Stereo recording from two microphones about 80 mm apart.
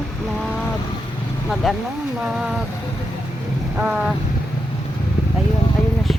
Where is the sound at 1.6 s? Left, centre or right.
Centre.